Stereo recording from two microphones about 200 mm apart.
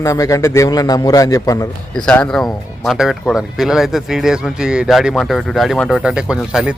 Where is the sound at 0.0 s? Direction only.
15° left (ahead or behind).